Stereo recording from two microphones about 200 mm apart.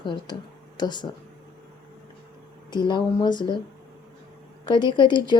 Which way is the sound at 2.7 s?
20° left (ahead or behind).